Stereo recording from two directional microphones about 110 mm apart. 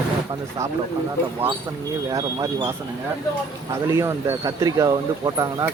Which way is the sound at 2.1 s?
30° right (ahead or behind).